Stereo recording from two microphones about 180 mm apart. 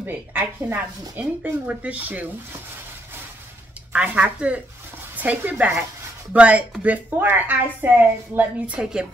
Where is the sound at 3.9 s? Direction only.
10° right (ahead or behind).